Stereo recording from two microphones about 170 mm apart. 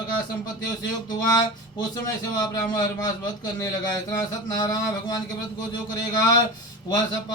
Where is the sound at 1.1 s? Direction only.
25° left (ahead or behind).